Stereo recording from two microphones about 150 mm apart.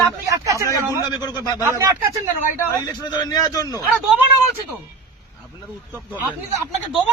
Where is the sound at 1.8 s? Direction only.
15° right (ahead or behind).